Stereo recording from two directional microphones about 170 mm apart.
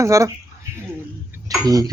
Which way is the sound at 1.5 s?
20° right (ahead or behind).